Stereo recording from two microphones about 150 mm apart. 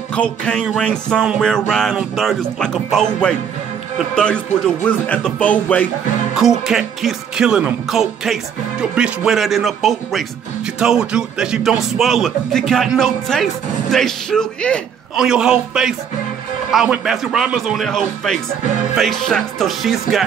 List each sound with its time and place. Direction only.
0.1 s speech: 5° left (ahead or behind)
4.1 s speech: 5° left (ahead or behind)
6.6 s speech: 5° right (ahead or behind)
15.1 s speech: 5° right (ahead or behind)